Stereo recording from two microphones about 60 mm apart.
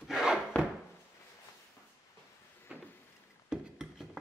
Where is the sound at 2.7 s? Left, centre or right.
Centre.